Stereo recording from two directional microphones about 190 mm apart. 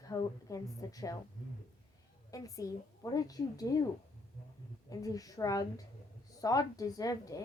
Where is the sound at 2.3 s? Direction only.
15° left (ahead or behind).